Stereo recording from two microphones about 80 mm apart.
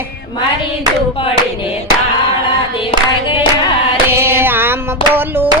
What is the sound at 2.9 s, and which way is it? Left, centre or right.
Singing, left.